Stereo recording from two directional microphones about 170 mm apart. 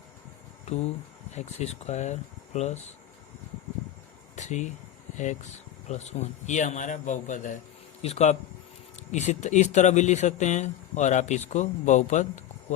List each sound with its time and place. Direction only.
1.4 s speech: 40° left (ahead or behind)
4.4 s a sound: 45° left (ahead or behind)
5.1 s speech: 45° left (ahead or behind)